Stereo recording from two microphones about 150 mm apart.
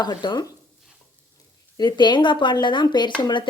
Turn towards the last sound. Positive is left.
turn(degrees=30)  # may be behind; listen again after turning